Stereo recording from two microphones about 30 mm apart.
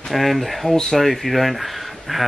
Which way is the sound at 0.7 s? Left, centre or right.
Centre.